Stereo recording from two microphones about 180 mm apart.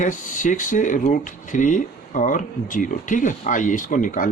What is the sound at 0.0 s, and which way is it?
Speech, 45° left (ahead or behind).